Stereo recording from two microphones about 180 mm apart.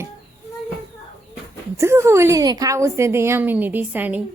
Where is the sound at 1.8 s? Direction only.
15° right (ahead or behind).